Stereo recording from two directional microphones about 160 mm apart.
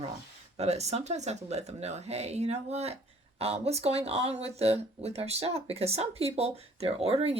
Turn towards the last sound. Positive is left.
turn(degrees=-40)  # may be behind; listen again after turning